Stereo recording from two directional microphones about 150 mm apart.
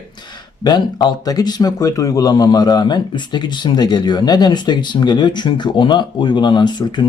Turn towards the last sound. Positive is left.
turn(degrees=30)  # may be behind; listen again after turning